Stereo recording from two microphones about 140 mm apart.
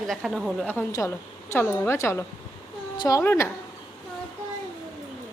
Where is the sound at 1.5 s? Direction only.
20° left (ahead or behind).